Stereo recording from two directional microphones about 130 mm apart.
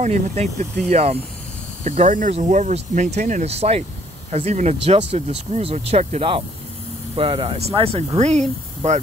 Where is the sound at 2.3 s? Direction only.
60° right (ahead or behind).